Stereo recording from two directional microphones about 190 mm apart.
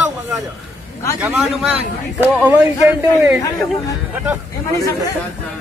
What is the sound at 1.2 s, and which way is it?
A man's voice, 5° right (ahead or behind).